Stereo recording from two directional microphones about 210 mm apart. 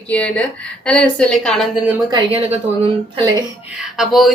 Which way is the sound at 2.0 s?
25° right (ahead or behind).